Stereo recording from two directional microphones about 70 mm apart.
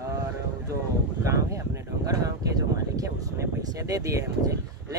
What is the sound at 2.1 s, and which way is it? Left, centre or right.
Speech, right.